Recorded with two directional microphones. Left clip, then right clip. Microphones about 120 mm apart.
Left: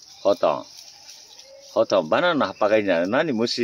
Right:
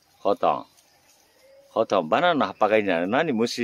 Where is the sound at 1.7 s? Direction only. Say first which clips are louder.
Left 2 dB; 25° right (ahead or behind).